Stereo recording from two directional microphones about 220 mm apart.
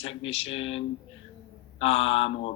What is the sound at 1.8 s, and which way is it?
Speech, 25° left (ahead or behind).